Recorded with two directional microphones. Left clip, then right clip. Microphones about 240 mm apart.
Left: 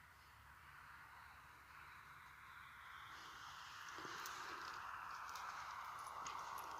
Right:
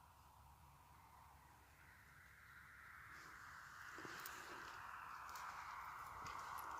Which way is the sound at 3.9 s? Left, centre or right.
Left.